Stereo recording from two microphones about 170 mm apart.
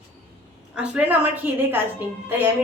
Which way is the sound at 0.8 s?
10° right (ahead or behind).